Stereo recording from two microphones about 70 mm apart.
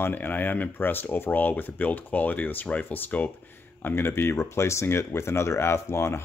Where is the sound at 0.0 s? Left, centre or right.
Left.